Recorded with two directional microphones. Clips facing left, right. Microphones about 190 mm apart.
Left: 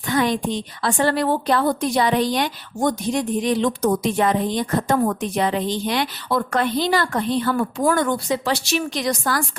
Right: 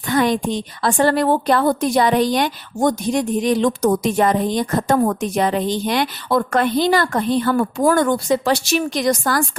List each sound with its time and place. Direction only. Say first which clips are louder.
0.1 s a woman's voice: right 3 dB; 50° right (ahead or behind)